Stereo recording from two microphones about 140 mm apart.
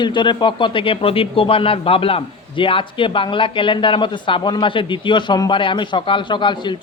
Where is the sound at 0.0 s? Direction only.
35° left (ahead or behind).